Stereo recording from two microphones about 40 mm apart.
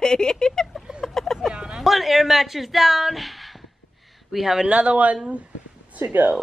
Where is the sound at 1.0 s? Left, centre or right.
Centre.